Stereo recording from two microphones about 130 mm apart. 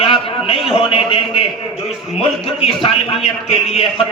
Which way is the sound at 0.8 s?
45° left (ahead or behind).